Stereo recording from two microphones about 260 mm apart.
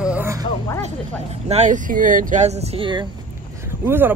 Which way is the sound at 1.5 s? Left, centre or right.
Right.